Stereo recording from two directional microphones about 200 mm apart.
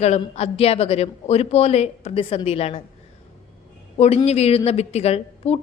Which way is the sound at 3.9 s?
30° left (ahead or behind).